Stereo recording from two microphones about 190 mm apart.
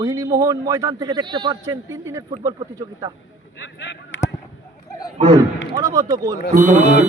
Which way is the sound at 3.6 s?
70° left (ahead or behind).